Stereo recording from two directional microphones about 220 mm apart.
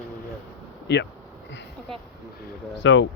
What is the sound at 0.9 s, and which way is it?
Speech, 50° left (ahead or behind).